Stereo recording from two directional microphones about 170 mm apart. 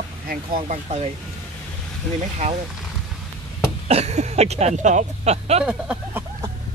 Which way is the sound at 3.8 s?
40° right (ahead or behind).